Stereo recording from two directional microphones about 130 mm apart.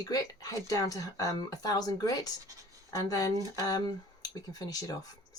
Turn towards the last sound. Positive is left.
turn(degrees=30)  # may be behind; listen again after turning